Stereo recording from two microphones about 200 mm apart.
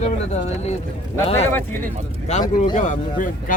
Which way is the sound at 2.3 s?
35° left (ahead or behind).